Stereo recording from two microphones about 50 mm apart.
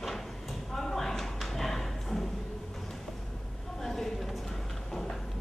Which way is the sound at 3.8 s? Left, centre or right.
Centre.